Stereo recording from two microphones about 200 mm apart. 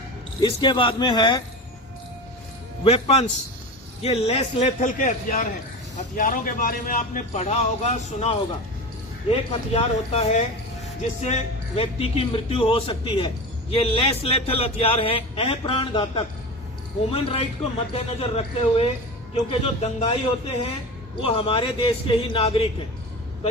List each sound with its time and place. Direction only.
0.3 s a man's voice: 20° left (ahead or behind)
2.8 s a man's voice: 30° left (ahead or behind)
11.8 s a man's voice: 30° left (ahead or behind)